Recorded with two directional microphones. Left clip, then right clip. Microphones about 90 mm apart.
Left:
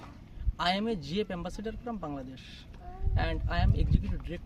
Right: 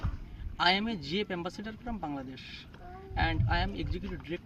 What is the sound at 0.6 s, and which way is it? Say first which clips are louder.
Speech: right 2 dB; 50° left (ahead or behind).